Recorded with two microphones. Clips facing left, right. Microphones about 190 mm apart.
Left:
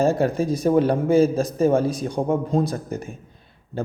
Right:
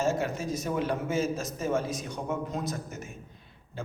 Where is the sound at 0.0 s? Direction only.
35° left (ahead or behind).